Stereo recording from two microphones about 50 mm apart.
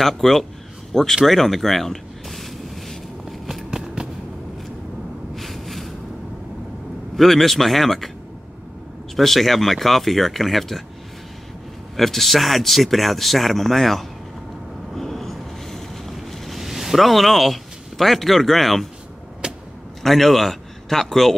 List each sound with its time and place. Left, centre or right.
0.0 s speech: centre
1.1 s a sound: centre
3.7 s a sound: centre
5.3 s a sound: centre
7.2 s speech: centre
9.1 s speech: centre
12.0 s speech: centre
15.0 s boat: centre
19.4 s vehicle: centre
20.0 s a man's voice: centre